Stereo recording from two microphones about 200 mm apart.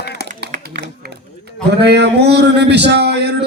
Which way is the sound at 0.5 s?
35° right (ahead or behind).